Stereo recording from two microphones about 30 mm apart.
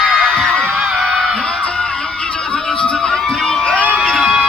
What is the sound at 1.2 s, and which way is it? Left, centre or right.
Music, centre.